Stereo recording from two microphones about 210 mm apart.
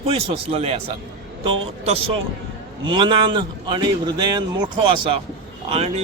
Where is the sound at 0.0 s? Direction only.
30° right (ahead or behind).